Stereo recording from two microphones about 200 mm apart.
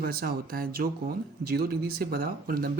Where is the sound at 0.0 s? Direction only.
50° right (ahead or behind).